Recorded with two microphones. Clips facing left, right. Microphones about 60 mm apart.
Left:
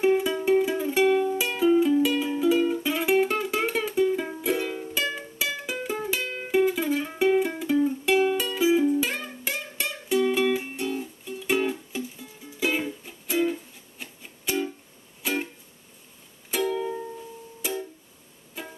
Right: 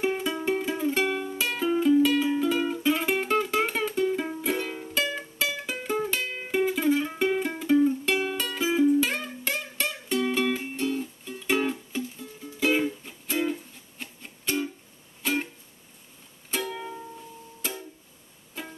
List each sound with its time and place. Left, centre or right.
0.0 s music: centre
16.5 s music: centre